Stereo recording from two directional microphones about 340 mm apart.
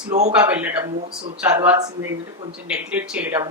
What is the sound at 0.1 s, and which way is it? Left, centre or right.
Speech, centre.